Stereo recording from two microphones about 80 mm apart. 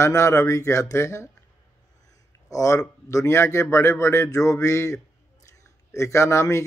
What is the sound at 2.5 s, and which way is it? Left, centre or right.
Speech, left.